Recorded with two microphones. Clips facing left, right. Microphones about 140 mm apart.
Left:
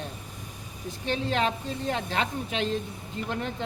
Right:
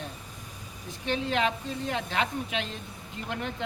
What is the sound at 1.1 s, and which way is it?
Speech, 35° left (ahead or behind).